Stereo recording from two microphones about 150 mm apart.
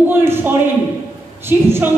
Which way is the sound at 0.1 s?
15° right (ahead or behind).